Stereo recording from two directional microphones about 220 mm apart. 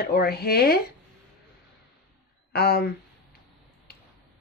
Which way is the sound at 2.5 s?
45° left (ahead or behind).